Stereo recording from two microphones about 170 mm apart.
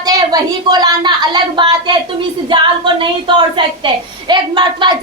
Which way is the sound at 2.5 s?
30° right (ahead or behind).